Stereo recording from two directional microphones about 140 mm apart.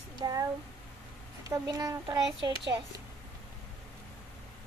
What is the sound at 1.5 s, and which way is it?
Speech, 25° right (ahead or behind).